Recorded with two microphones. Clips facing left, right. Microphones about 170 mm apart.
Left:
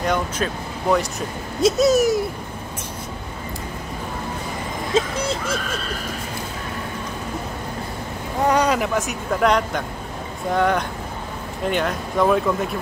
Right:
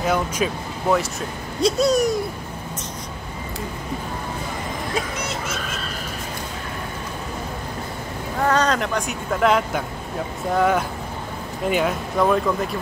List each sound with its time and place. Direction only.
0.0 s speech: 5° right (ahead or behind)
1.6 s speech: centre (ahead or behind)
4.9 s vehicle: 30° left (ahead or behind)
8.4 s speech: 15° left (ahead or behind)